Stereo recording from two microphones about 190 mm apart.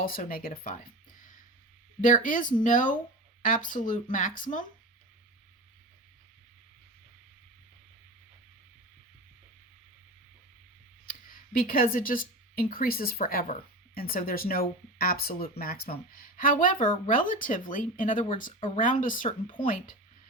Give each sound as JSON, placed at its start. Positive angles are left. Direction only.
{"t": 0.0, "sound": "speech", "side_deg": 50}
{"t": 2.0, "sound": "speech", "side_deg": 45}
{"t": 11.0, "sound": "speech", "side_deg": 45}